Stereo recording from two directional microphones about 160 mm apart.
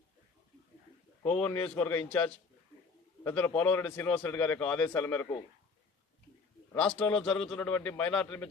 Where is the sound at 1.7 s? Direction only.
10° left (ahead or behind).